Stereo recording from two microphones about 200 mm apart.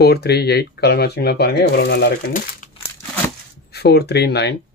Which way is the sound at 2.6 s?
40° left (ahead or behind).